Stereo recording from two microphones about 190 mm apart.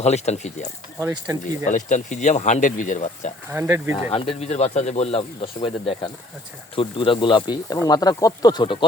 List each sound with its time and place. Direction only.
0.0 s speech: 35° left (ahead or behind)
0.9 s speech: 15° right (ahead or behind)
1.7 s speech: 40° left (ahead or behind)
3.5 s speech: 10° right (ahead or behind)
3.9 s speech: 30° left (ahead or behind)
6.7 s speech: 25° left (ahead or behind)